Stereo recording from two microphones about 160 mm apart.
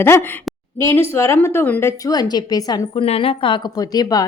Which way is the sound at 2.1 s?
25° left (ahead or behind).